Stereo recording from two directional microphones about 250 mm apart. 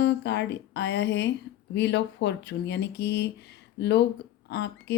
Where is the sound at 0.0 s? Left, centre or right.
Left.